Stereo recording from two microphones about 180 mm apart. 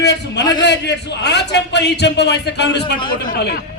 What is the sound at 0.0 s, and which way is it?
A man's voice, 70° left (ahead or behind).